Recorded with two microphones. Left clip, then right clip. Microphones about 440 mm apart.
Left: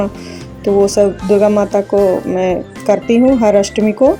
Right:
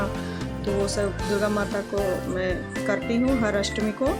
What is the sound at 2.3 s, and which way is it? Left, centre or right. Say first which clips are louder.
Speech: left 12 dB; right.